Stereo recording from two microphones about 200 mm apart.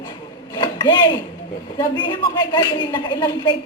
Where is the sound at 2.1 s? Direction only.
20° left (ahead or behind).